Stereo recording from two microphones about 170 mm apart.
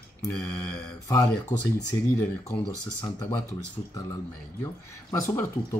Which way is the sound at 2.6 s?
25° left (ahead or behind).